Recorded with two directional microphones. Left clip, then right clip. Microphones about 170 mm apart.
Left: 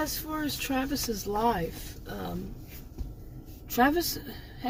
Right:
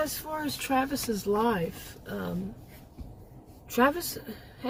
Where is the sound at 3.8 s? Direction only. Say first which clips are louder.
Even; 25° right (ahead or behind).